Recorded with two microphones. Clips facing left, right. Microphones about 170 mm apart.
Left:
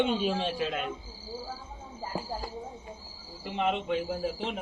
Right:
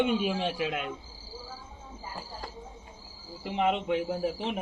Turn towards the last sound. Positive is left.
turn(degrees=-20)  # may be behind; listen again after turning